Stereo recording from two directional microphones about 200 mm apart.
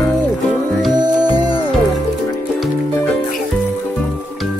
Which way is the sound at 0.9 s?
20° right (ahead or behind).